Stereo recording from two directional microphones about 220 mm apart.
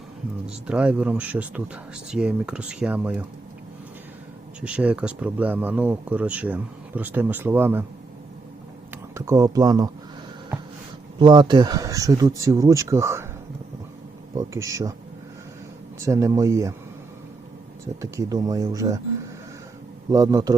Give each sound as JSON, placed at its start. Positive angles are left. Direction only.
{"t": 0.4, "sound": "speech", "side_deg": -5}
{"t": 4.6, "sound": "speech", "side_deg": -5}
{"t": 9.1, "sound": "speech", "side_deg": -15}
{"t": 11.2, "sound": "speech", "side_deg": -20}
{"t": 14.3, "sound": "speech", "side_deg": -15}
{"t": 16.0, "sound": "speech", "side_deg": -15}
{"t": 18.0, "sound": "speech", "side_deg": -15}
{"t": 20.1, "sound": "speech", "side_deg": -15}